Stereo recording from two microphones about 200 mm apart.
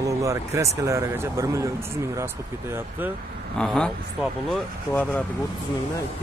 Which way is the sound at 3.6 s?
5° left (ahead or behind).